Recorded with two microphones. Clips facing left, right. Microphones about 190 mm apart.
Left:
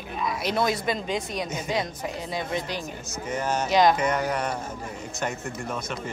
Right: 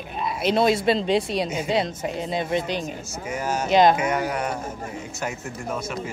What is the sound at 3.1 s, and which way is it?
Speech, 10° right (ahead or behind).